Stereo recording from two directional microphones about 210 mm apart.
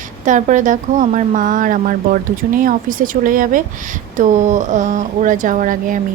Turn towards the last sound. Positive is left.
turn(degrees=-40)  # may be behind; listen again after turning